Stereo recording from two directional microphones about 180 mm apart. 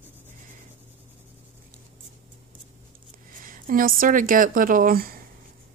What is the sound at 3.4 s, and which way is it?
A woman's voice, 50° right (ahead or behind).